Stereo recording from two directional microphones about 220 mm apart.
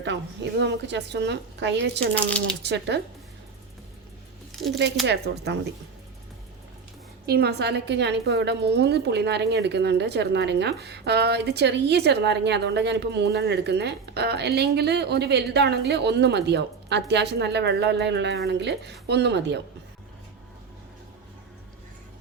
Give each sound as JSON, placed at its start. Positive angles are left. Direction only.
{"t": 0.6, "sound": "a woman's voice", "side_deg": -50}
{"t": 4.5, "sound": "speech", "side_deg": 0}
{"t": 5.0, "sound": "a woman's voice", "side_deg": -50}
{"t": 7.3, "sound": "a woman's voice", "side_deg": -45}